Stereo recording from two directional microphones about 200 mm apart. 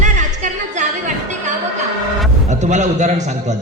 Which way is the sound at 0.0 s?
35° right (ahead or behind).